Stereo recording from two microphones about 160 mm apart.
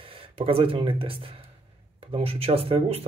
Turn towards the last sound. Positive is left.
turn(degrees=-40)  # may be behind; listen again after turning